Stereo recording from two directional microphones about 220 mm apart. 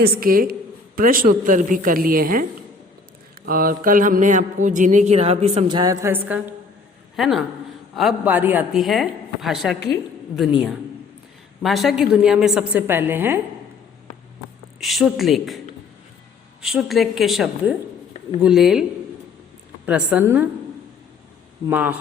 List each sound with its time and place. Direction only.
0.0 s a woman's voice: 40° right (ahead or behind); by 10.5 s centre (ahead or behind)
11.6 s a woman's voice: centre (ahead or behind)
14.8 s a woman's voice: centre (ahead or behind)
21.7 s a woman's voice: 10° right (ahead or behind)